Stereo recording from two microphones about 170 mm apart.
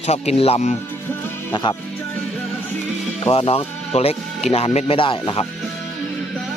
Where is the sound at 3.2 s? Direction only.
35° left (ahead or behind).